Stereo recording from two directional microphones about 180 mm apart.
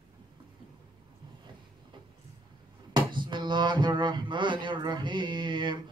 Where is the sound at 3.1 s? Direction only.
25° right (ahead or behind).